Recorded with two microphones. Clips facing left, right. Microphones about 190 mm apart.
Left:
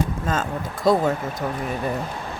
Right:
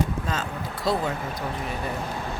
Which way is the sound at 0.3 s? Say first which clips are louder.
Left 5 dB; 50° left (ahead or behind).